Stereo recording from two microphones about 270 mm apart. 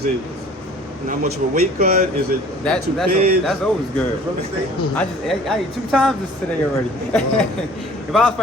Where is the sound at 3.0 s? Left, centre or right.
Right.